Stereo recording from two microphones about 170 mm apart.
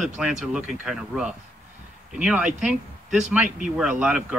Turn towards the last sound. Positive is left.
turn(degrees=-5)  # may be behind; listen again after turning